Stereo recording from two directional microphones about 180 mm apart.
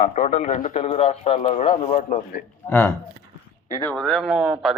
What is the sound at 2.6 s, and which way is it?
Speech, 15° left (ahead or behind).